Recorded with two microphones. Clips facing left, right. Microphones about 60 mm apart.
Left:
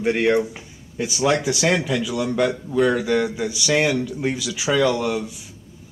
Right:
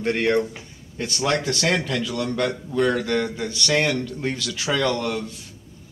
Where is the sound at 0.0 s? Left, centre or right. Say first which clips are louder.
Left 2 dB; centre.